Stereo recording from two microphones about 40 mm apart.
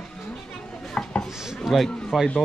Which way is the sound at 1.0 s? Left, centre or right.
Left.